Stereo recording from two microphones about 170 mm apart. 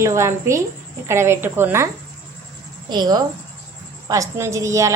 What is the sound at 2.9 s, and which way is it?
A woman's voice, 25° right (ahead or behind).